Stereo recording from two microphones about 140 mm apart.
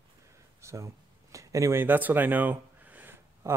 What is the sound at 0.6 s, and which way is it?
Speech, 20° right (ahead or behind).